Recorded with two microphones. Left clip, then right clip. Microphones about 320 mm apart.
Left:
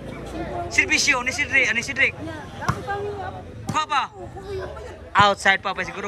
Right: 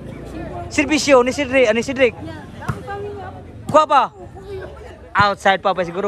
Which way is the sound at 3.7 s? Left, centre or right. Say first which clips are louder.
Right 10 dB; centre.